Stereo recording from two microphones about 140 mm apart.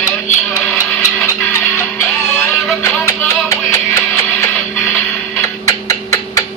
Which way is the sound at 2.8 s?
20° left (ahead or behind).